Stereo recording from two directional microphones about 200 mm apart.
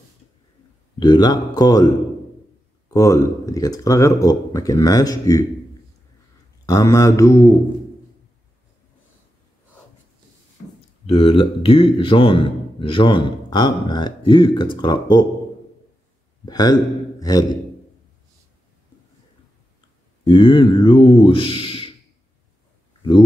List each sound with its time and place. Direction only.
0.9 s a man's voice: 20° left (ahead or behind)
6.6 s speech: 15° left (ahead or behind)
11.1 s a man's voice: 30° left (ahead or behind)
16.4 s a man's voice: 20° left (ahead or behind)
20.2 s a man's voice: 25° left (ahead or behind)